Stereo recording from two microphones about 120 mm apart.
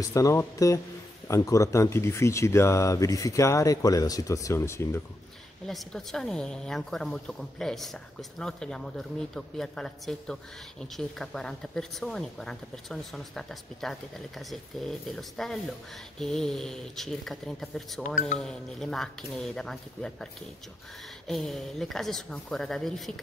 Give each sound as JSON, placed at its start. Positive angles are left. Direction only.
{"t": 0.1, "sound": "speech", "side_deg": 25}
{"t": 5.7, "sound": "a woman's voice", "side_deg": 5}
{"t": 21.3, "sound": "a woman's voice", "side_deg": 0}